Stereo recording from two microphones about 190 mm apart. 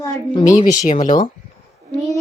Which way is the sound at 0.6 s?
40° left (ahead or behind).